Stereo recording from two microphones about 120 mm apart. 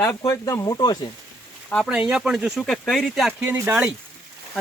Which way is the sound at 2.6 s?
5° left (ahead or behind).